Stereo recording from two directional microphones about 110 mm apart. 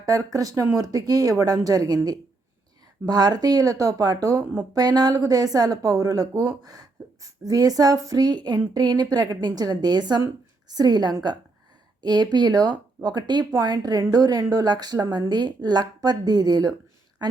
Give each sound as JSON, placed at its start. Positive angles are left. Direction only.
{"t": 0.0, "sound": "a woman's voice", "side_deg": -35}